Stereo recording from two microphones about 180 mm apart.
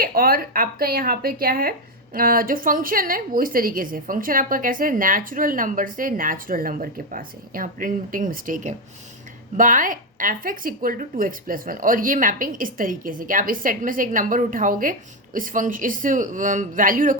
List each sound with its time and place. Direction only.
0.0 s a woman's voice: 55° right (ahead or behind)